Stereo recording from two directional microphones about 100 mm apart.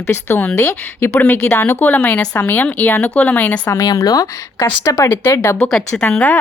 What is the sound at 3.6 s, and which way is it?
Speech, 35° left (ahead or behind).